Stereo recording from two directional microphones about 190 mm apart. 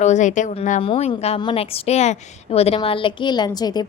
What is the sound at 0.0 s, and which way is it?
A woman's voice, 40° left (ahead or behind).